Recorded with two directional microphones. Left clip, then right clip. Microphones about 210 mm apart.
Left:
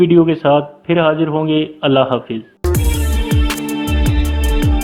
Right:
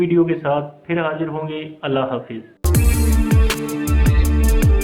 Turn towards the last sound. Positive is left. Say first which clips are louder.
# left 2 dB
turn(degrees=0)  # may be behind; listen again after turning